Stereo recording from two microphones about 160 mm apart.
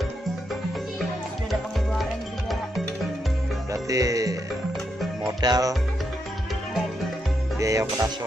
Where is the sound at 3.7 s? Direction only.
20° right (ahead or behind).